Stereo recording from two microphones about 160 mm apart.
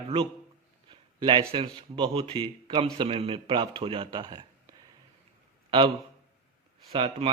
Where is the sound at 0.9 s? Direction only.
30° right (ahead or behind).